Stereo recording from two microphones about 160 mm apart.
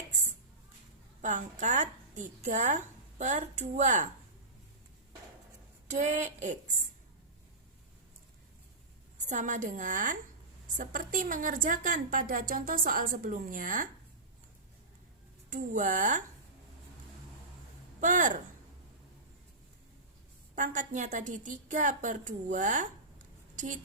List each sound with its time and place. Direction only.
1.2 s a woman's voice: 50° right (ahead or behind)
5.9 s a woman's voice: 50° right (ahead or behind)
9.2 s a woman's voice: 50° right (ahead or behind)
15.4 s a woman's voice: 50° right (ahead or behind)
18.0 s a woman's voice: 50° right (ahead or behind)
20.6 s a woman's voice: 50° right (ahead or behind)